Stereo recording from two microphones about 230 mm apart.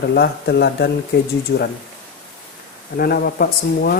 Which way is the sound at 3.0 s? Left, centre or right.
Left.